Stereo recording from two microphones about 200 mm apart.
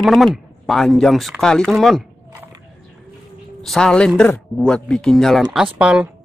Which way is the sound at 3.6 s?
Centre (ahead or behind).